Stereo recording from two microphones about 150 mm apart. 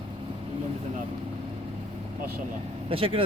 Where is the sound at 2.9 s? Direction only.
35° right (ahead or behind).